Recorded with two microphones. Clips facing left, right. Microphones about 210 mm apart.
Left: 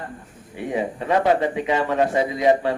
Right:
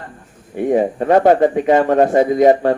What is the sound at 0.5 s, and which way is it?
A man's voice, 50° right (ahead or behind).